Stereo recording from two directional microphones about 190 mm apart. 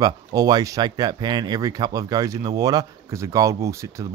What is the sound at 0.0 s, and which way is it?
Speech, 20° right (ahead or behind).